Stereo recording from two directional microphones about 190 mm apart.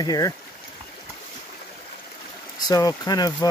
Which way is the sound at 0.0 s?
20° left (ahead or behind).